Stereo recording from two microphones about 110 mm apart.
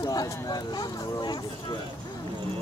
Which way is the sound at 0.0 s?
35° left (ahead or behind).